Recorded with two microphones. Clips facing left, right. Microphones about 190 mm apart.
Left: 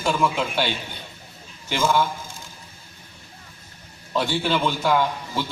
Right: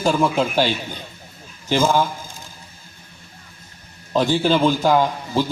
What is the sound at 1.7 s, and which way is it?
Speech, 40° right (ahead or behind).